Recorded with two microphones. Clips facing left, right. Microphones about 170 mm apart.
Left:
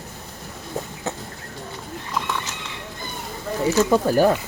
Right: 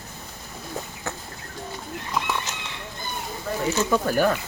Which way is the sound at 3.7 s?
35° left (ahead or behind).